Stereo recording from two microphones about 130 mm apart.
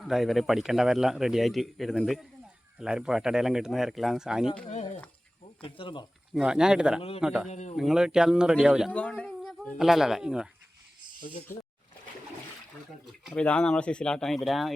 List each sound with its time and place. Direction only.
0.0 s speech: centre (ahead or behind)
5.6 s speech: 45° left (ahead or behind)
6.3 s speech: 5° right (ahead or behind)
7.5 s speech: 60° left (ahead or behind)
7.8 s speech: 5° right (ahead or behind)
8.9 s speech: 10° left (ahead or behind)
9.4 s speech: centre (ahead or behind)
11.5 s speech: 20° left (ahead or behind)
13.1 s speech: 5° left (ahead or behind)